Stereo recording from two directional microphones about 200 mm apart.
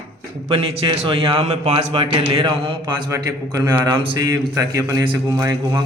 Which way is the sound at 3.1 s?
15° right (ahead or behind).